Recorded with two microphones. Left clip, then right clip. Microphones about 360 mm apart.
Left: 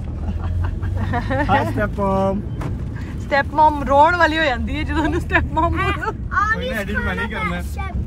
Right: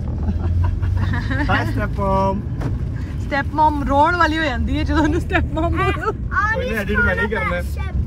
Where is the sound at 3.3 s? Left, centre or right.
Centre.